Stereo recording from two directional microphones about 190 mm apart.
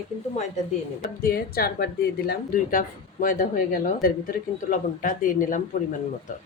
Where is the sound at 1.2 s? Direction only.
50° left (ahead or behind).